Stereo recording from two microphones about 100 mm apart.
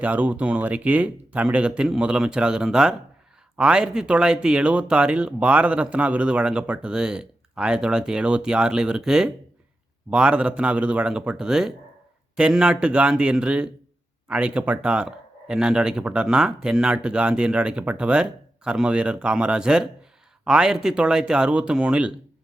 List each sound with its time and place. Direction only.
0.0 s speech: 15° right (ahead or behind)